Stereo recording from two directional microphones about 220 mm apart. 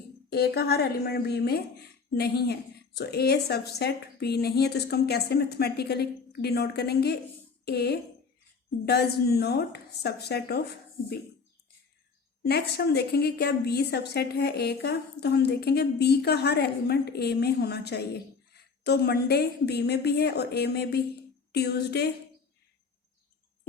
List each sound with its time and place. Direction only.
0.3 s a woman's voice: 45° left (ahead or behind)
12.4 s a woman's voice: 50° left (ahead or behind)